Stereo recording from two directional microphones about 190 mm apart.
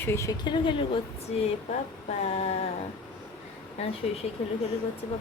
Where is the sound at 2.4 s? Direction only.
35° left (ahead or behind).